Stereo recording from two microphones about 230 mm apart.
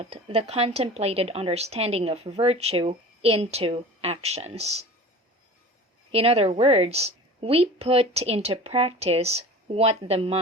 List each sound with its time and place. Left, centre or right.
0.0 s speech: right
6.1 s speech: right